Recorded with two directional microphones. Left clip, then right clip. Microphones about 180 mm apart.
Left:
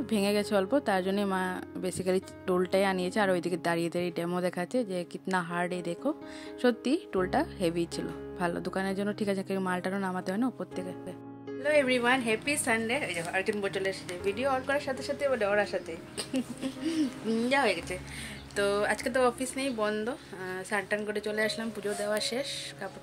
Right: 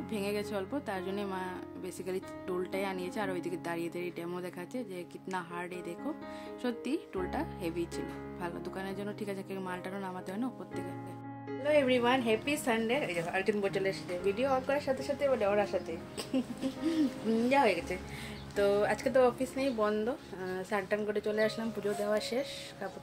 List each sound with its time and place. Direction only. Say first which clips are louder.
0.0 s speech: left 6 dB; 50° left (ahead or behind)
11.6 s a woman's voice: left 2 dB; centre (ahead or behind)